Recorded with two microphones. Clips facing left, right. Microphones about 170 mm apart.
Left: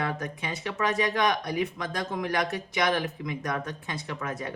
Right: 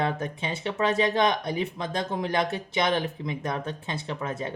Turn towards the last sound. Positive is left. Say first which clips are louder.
# right 2 dB
turn(degrees=-25)  # may be behind; listen again after turning